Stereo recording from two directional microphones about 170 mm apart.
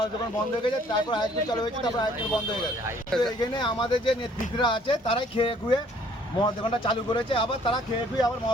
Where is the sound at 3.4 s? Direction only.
25° left (ahead or behind).